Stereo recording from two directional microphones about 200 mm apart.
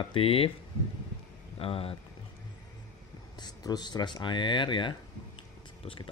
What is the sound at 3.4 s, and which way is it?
Speech, 20° left (ahead or behind).